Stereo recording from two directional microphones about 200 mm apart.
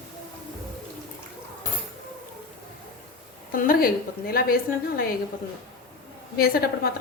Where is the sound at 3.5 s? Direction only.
45° left (ahead or behind).